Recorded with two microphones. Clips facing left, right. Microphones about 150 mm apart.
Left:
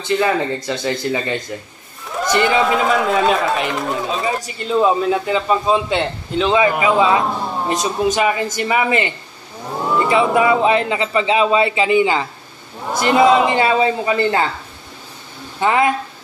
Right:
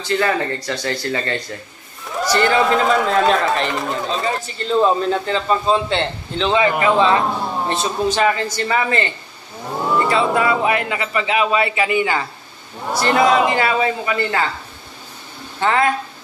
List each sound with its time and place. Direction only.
0.0 s a man's voice: 15° left (ahead or behind)
2.6 s a man's voice: centre (ahead or behind)
7.2 s a sound: centre (ahead or behind)
8.1 s a man's voice: 15° left (ahead or behind)
9.7 s a sound: centre (ahead or behind)
10.0 s speech: 15° left (ahead or behind)
13.0 s speech: 10° left (ahead or behind)
13.5 s speech: 25° left (ahead or behind)
15.6 s a man's voice: 15° left (ahead or behind)